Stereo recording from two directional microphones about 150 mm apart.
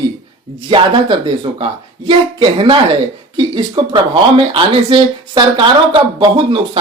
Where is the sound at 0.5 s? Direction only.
35° right (ahead or behind).